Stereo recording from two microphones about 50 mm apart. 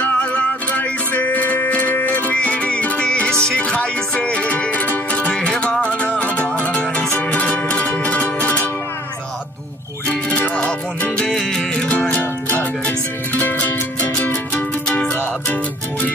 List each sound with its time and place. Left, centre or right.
0.0 s music: left
5.3 s music: centre
10.5 s music: left
11.2 s music: centre
12.2 s music: left
14.9 s music: left